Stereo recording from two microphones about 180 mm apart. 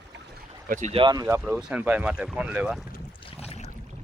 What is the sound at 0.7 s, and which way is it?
Speech, 40° right (ahead or behind).